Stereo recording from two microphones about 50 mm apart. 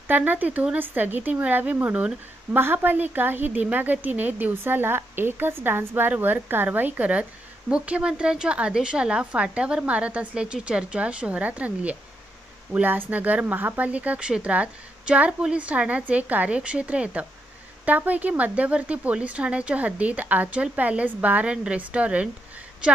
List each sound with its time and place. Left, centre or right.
0.1 s a woman's voice: right
2.5 s a woman's voice: right
13.8 s speech: right